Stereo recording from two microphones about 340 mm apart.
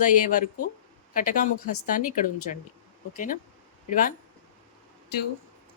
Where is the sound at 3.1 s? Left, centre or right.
Left.